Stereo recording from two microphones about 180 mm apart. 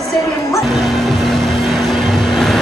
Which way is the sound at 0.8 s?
Centre (ahead or behind).